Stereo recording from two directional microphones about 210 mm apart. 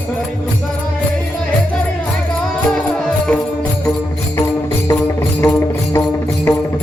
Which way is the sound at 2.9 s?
5° left (ahead or behind).